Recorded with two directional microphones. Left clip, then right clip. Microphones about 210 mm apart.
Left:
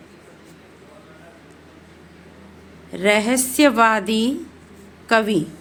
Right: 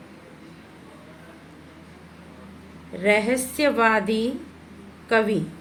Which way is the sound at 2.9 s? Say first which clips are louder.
Left 3 dB; 55° left (ahead or behind).